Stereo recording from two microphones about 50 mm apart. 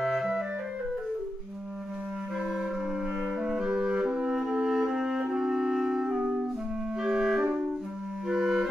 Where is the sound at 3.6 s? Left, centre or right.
Right.